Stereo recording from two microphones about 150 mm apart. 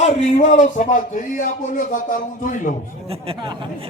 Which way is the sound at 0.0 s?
50° left (ahead or behind).